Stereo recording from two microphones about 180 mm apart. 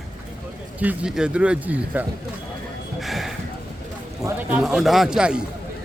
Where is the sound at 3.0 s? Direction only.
Centre (ahead or behind).